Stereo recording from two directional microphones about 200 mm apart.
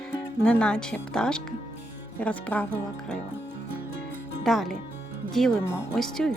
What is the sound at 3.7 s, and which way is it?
Music, 45° right (ahead or behind).